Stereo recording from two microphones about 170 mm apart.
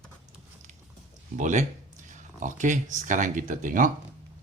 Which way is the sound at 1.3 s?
45° right (ahead or behind).